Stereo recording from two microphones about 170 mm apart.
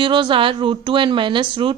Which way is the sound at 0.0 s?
30° right (ahead or behind).